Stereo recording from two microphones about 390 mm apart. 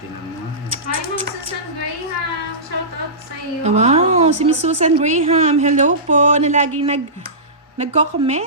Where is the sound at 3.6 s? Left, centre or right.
Centre.